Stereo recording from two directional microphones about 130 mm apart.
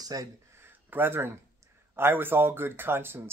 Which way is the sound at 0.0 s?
30° right (ahead or behind).